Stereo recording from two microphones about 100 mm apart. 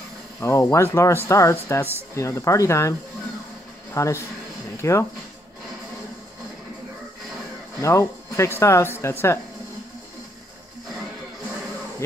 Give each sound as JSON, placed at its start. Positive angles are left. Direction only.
{"t": 0.4, "sound": "speech", "side_deg": 30}
{"t": 7.8, "sound": "speech", "side_deg": 30}